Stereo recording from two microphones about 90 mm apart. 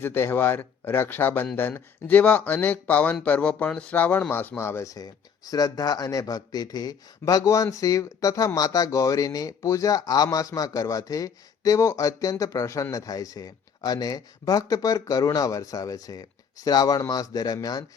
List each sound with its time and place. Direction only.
0.0 s speech: 25° left (ahead or behind); by 17.8 s 45° left (ahead or behind)